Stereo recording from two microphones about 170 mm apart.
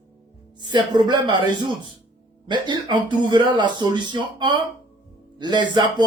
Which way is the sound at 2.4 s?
25° right (ahead or behind).